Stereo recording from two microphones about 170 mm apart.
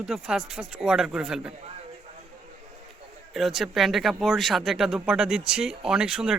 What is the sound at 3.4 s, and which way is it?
Speech, centre (ahead or behind).